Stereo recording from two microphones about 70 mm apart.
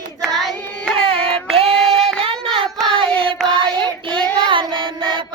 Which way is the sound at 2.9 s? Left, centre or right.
Centre.